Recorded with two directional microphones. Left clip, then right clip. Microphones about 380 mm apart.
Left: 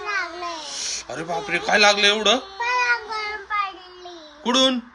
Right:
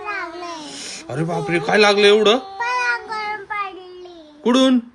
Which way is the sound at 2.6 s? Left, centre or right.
Right.